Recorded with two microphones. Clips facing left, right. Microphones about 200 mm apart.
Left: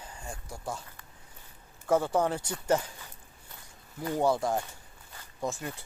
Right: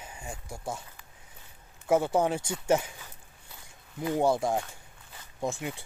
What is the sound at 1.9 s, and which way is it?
Speech, 20° right (ahead or behind).